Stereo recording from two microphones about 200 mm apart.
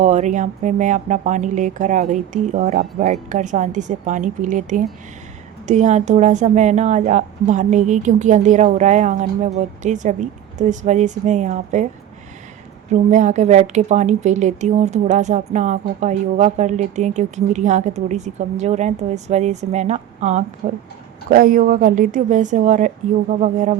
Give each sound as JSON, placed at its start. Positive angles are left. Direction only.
{"t": 0.0, "sound": "a woman's voice", "side_deg": -35}
{"t": 12.9, "sound": "a woman's voice", "side_deg": -35}
{"t": 20.6, "sound": "a woman's voice", "side_deg": -50}